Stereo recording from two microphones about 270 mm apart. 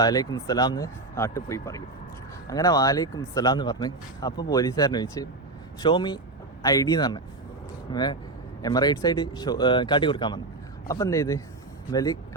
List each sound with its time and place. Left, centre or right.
0.0 s speech: centre